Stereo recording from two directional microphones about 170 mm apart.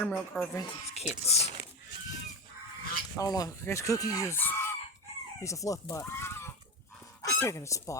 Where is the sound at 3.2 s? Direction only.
20° left (ahead or behind).